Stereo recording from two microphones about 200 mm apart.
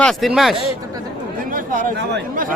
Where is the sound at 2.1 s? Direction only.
50° right (ahead or behind).